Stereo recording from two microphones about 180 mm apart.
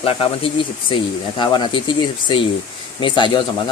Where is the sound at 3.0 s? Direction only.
25° left (ahead or behind).